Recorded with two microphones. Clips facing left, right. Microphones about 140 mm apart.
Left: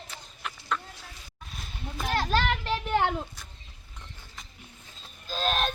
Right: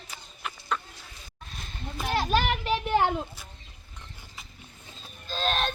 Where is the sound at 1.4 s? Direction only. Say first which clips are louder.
Even; centre (ahead or behind).